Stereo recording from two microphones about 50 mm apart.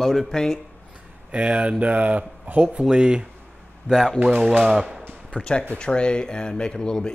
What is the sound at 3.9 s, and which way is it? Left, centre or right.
Speech, left.